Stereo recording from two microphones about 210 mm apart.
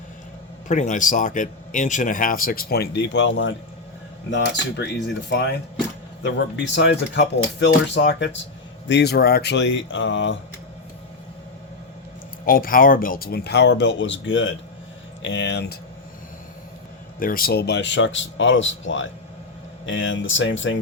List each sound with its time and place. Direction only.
0.7 s a man's voice: 35° left (ahead or behind); by 5.5 s 55° left (ahead or behind)
6.7 s speech: 55° left (ahead or behind)
12.5 s speech: 45° left (ahead or behind)
17.2 s speech: 40° left (ahead or behind); by 20.7 s 65° left (ahead or behind)